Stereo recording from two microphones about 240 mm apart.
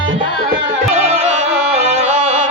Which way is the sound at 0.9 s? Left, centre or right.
Right.